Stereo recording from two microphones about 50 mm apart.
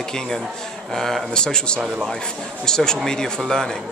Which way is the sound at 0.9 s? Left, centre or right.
Centre.